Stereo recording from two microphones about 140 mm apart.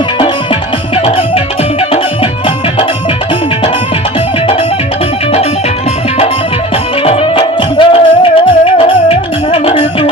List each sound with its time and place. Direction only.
7.0 s music: 40° left (ahead or behind)